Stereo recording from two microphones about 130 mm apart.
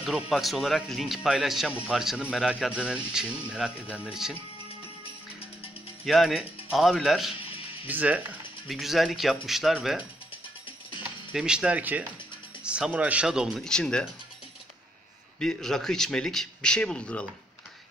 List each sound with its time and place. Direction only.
0.0 s speech: centre (ahead or behind)
6.0 s speech: centre (ahead or behind)
7.3 s music: 45° left (ahead or behind)
7.8 s speech: 10° right (ahead or behind)
11.3 s speech: 5° right (ahead or behind)
15.3 s speech: 5° left (ahead or behind)